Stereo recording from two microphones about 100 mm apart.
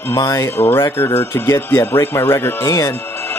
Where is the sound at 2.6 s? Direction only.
40° left (ahead or behind).